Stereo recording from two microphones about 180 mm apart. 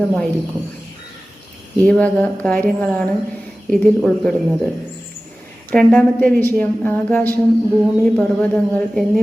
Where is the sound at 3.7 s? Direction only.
5° left (ahead or behind).